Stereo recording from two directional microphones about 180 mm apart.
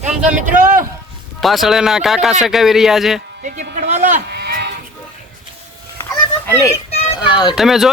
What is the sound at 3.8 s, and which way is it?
Sheep, 40° right (ahead or behind).